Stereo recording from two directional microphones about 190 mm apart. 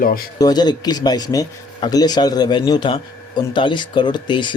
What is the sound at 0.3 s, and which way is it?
Speech, 20° left (ahead or behind).